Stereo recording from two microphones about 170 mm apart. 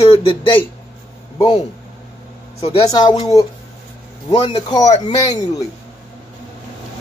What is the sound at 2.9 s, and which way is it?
Speech, 25° left (ahead or behind).